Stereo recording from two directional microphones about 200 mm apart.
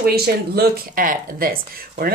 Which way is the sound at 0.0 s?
50° right (ahead or behind).